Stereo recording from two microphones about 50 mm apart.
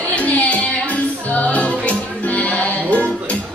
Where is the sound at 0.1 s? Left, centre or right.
Left.